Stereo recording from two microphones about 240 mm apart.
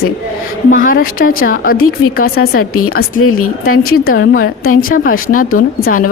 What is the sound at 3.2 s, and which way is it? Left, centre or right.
Speech, left.